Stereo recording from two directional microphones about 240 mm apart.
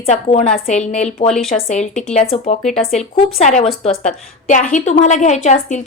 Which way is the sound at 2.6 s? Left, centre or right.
Centre.